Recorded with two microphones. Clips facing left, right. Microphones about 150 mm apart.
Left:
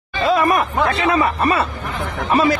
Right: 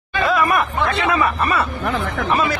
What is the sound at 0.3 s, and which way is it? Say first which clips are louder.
Speech: left 3 dB; 35° left (ahead or behind).